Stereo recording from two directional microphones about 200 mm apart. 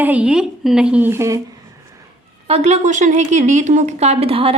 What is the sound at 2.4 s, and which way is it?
A woman's voice, 30° right (ahead or behind).